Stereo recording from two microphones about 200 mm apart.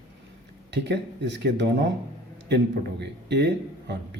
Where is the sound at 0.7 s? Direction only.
60° right (ahead or behind).